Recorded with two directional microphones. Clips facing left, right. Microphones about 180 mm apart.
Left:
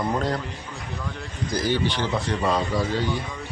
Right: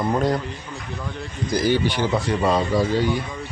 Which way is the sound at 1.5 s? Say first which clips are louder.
Right 4 dB; 10° right (ahead or behind).